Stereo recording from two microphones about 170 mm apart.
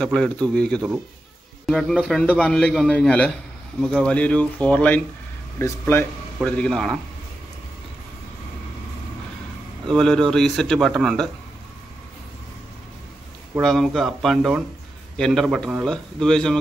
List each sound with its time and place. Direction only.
0.0 s a man's voice: 5° left (ahead or behind)
9.8 s a man's voice: centre (ahead or behind)
13.6 s a man's voice: centre (ahead or behind)